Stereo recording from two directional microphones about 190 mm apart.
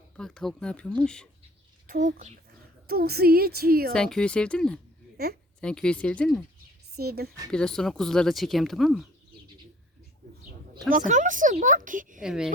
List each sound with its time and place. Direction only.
0.2 s speech: 5° left (ahead or behind)
1.9 s speech: 40° right (ahead or behind)
2.8 s a woman's voice: 55° right (ahead or behind)
3.9 s speech: 5° left (ahead or behind)
5.1 s a woman's voice: 55° right (ahead or behind)
5.5 s speech: 5° left (ahead or behind)
6.9 s a woman's voice: 55° right (ahead or behind)
7.5 s speech: 5° left (ahead or behind)
10.8 s speech: 45° right (ahead or behind)
12.2 s speech: 5° right (ahead or behind)